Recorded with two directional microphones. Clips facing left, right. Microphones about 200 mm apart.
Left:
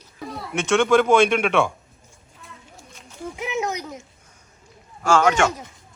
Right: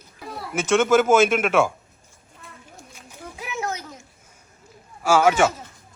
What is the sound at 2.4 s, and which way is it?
Children playing, centre (ahead or behind).